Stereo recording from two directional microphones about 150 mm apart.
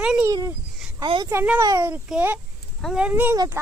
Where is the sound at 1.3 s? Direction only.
10° right (ahead or behind).